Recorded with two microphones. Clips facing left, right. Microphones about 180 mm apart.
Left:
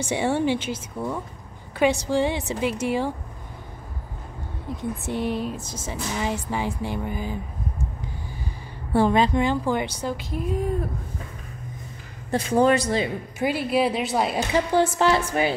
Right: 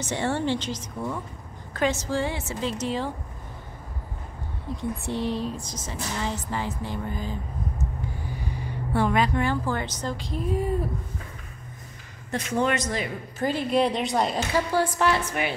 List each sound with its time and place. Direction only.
0.0 s a woman's voice: 10° left (ahead or behind)
5.1 s speech: 25° right (ahead or behind)
5.9 s a woman's voice: 10° left (ahead or behind)
8.9 s a woman's voice: 30° left (ahead or behind); by 10.9 s centre (ahead or behind)
12.3 s speech: 35° left (ahead or behind)
13.4 s a woman's voice: 10° left (ahead or behind)
14.5 s a woman's voice: 25° left (ahead or behind)